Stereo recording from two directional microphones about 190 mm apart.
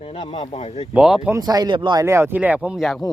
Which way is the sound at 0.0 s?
30° left (ahead or behind).